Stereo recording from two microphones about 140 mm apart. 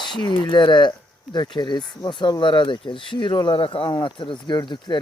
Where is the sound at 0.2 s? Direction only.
30° left (ahead or behind).